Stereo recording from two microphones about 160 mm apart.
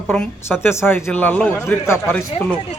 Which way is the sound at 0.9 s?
10° left (ahead or behind).